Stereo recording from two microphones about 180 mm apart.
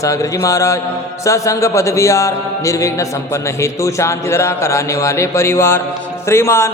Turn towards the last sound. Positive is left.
turn(degrees=15)  # may be behind; listen again after turning